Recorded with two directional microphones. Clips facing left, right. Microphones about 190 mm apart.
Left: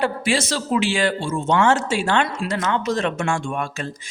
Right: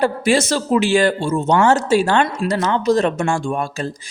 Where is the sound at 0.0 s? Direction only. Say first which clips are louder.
Right 5 dB; 45° right (ahead or behind).